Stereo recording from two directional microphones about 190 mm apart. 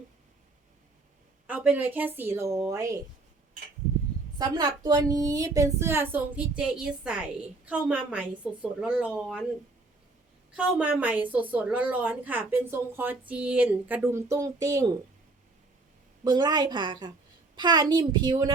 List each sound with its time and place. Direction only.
1.5 s a woman's voice: 10° right (ahead or behind)
4.4 s a woman's voice: 20° right (ahead or behind); by 9.4 s 5° right (ahead or behind)
10.5 s a woman's voice: 5° right (ahead or behind)
16.2 s a woman's voice: 20° right (ahead or behind)